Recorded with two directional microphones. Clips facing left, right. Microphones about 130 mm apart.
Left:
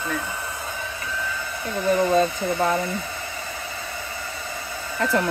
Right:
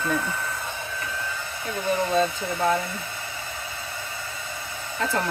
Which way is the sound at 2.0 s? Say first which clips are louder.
Left 3 dB; 55° left (ahead or behind).